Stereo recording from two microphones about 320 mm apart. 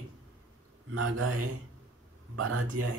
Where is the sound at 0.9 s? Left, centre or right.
Right.